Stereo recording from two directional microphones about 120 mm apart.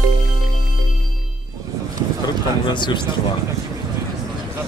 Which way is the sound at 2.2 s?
40° left (ahead or behind).